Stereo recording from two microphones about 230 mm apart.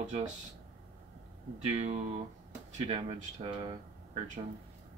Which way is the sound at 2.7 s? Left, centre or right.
Right.